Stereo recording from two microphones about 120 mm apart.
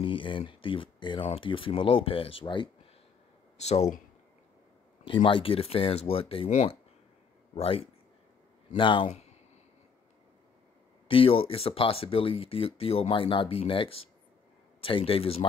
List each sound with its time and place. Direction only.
0.0 s speech: 45° left (ahead or behind)
3.5 s speech: 65° left (ahead or behind)
5.0 s speech: 45° left (ahead or behind)
6.5 s speech: 65° left (ahead or behind)
7.5 s speech: 55° left (ahead or behind)
11.1 s speech: 50° left (ahead or behind)